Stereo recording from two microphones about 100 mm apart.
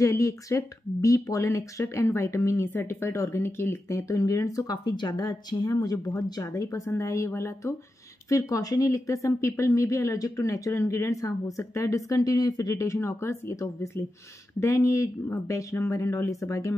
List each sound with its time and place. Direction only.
0.0 s speech: 35° left (ahead or behind)